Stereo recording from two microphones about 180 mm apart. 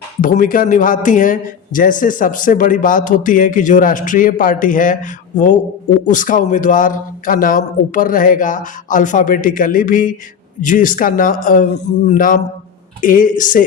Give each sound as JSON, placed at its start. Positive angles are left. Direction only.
{"t": 0.2, "sound": "a man's voice", "side_deg": 50}